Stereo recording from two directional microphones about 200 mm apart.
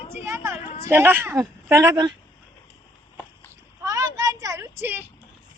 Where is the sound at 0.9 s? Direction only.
10° right (ahead or behind).